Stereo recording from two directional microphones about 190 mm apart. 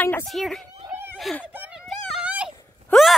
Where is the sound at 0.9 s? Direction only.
10° right (ahead or behind).